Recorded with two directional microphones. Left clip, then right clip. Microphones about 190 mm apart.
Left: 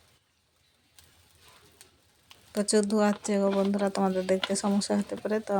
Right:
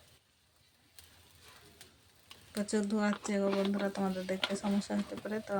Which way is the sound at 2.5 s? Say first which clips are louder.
Left 9 dB; 30° left (ahead or behind).